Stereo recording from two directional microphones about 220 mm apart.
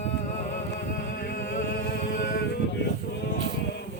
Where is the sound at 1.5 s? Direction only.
40° left (ahead or behind).